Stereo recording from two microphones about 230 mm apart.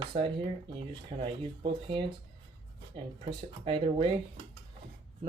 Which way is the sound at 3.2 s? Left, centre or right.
Right.